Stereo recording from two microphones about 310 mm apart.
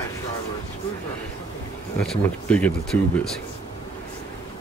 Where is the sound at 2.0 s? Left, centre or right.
Centre.